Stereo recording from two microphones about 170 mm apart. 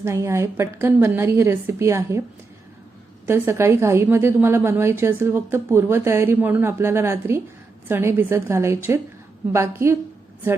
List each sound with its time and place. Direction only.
0.0 s a woman's voice: 15° right (ahead or behind)
3.2 s a woman's voice: 15° right (ahead or behind)